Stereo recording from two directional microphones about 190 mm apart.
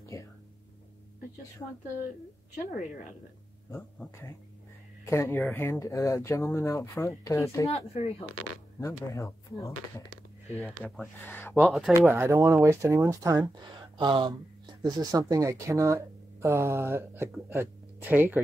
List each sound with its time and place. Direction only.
2.5 s a woman's voice: 40° left (ahead or behind)
3.7 s speech: 15° left (ahead or behind)
7.7 s a woman's voice: 30° left (ahead or behind)
8.7 s speech: 15° left (ahead or behind)
11.6 s speech: centre (ahead or behind)
12.0 s speech: 10° right (ahead or behind)